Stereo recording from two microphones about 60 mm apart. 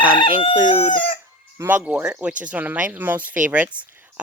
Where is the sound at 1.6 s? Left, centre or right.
Right.